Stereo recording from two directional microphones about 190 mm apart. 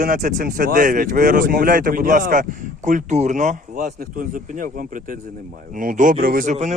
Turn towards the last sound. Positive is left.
turn(degrees=-40)  # may be behind; listen again after turning